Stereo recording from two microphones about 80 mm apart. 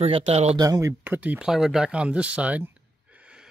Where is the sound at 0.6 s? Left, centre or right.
Right.